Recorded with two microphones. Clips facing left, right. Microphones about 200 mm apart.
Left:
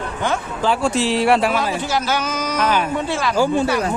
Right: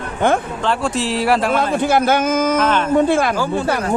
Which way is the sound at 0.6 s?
Centre (ahead or behind).